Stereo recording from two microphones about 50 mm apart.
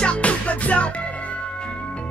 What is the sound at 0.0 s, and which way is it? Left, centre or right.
Music, left.